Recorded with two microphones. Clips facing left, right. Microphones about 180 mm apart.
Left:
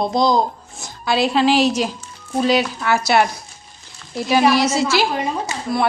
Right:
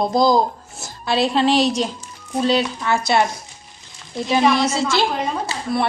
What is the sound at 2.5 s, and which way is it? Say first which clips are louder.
Speech: left 1 dB; 25° right (ahead or behind).